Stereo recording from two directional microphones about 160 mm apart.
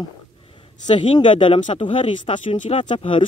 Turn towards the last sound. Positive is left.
turn(degrees=30)  # may be behind; listen again after turning